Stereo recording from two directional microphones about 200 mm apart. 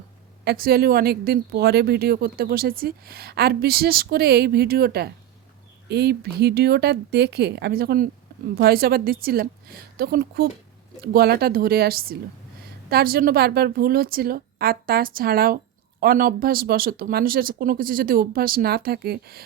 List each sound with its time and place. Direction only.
0.4 s a woman's voice: 50° right (ahead or behind)